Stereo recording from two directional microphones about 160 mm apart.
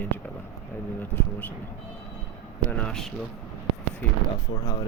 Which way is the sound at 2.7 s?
5° left (ahead or behind).